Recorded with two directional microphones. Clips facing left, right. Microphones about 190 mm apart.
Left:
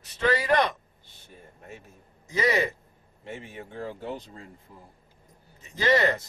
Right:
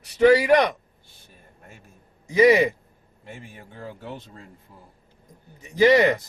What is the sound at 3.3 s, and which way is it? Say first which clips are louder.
Speech: left 3 dB; 20° left (ahead or behind).